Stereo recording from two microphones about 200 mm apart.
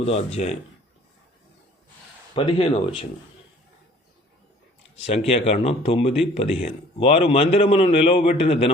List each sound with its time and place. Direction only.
0.0 s a man's voice: 30° left (ahead or behind)
2.3 s speech: 30° left (ahead or behind)
5.3 s a man's voice: 30° left (ahead or behind)